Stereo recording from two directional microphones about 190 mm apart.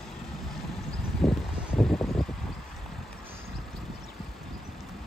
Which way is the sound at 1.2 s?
Centre (ahead or behind).